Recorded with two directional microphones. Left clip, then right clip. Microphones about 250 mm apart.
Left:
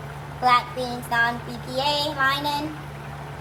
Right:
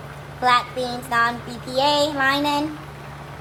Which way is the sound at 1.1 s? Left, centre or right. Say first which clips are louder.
Right 2 dB; right.